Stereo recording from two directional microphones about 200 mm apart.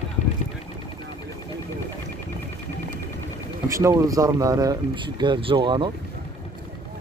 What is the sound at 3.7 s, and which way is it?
Speech, 15° right (ahead or behind).